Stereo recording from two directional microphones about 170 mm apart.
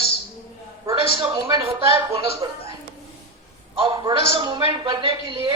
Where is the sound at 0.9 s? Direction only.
30° right (ahead or behind).